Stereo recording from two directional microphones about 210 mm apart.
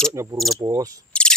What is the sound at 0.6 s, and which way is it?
Cricket, 15° right (ahead or behind).